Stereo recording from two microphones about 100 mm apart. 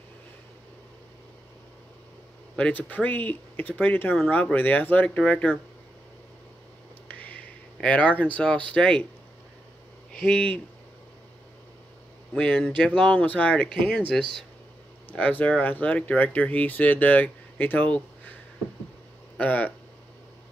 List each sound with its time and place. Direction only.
2.5 s speech: 15° left (ahead or behind)
7.1 s a sound: 15° left (ahead or behind)
7.7 s speech: 10° left (ahead or behind)
10.1 s speech: 10° left (ahead or behind)
12.4 s speech: 10° left (ahead or behind)
19.3 s speech: 15° left (ahead or behind)